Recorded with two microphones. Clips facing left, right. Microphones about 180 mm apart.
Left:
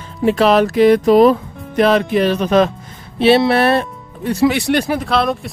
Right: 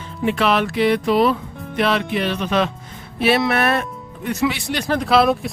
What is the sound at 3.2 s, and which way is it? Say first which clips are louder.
Speech: left 6 dB; 30° left (ahead or behind).